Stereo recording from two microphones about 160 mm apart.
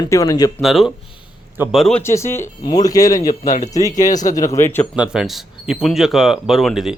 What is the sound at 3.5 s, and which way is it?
Speech, 50° left (ahead or behind).